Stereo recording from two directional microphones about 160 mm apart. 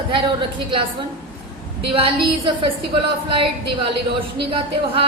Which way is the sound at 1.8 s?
35° right (ahead or behind).